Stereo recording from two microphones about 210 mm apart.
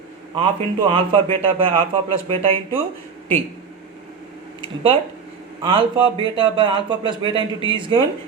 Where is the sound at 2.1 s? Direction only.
25° right (ahead or behind).